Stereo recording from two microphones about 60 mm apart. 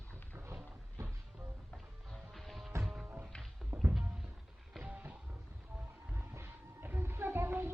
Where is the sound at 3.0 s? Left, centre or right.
Right.